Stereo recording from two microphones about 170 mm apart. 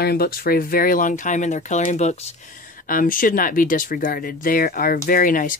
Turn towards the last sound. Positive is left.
turn(degrees=55)  # may be behind; listen again after turning